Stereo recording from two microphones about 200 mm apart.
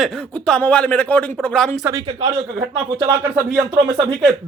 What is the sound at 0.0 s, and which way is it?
Speech, 5° left (ahead or behind).